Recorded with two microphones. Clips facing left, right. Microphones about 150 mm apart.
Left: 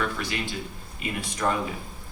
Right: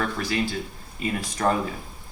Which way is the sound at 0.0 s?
40° right (ahead or behind).